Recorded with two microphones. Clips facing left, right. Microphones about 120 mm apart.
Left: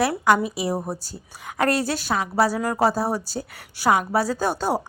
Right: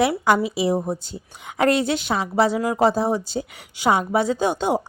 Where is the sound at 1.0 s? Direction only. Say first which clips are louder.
Right 2 dB; 20° right (ahead or behind).